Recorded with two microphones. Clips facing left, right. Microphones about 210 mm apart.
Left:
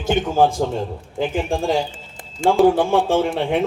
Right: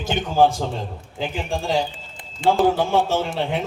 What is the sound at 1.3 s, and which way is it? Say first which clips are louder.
Speech: left 2 dB; 50° left (ahead or behind).